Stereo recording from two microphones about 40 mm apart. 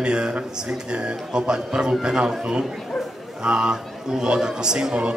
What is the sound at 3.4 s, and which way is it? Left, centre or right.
A man's voice, right.